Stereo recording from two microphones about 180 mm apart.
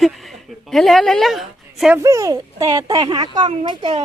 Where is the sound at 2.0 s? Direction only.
15° right (ahead or behind).